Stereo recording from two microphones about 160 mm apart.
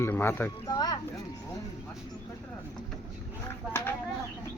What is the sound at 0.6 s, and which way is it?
Speech, 25° left (ahead or behind).